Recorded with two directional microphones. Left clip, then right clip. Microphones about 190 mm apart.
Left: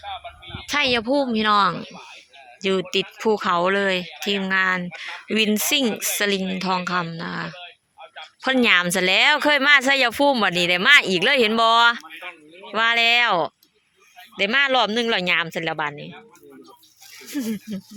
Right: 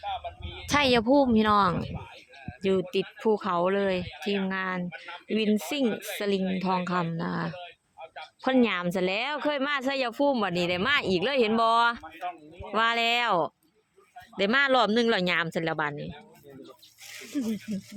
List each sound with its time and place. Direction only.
0.0 s speech: 65° right (ahead or behind)
0.7 s speech: 15° right (ahead or behind)
14.3 s speech: 15° right (ahead or behind)
17.3 s speech: 10° left (ahead or behind)